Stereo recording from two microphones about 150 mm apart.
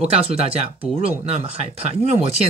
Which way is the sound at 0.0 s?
45° right (ahead or behind).